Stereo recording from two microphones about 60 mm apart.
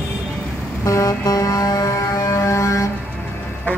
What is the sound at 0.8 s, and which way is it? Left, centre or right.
Music, left.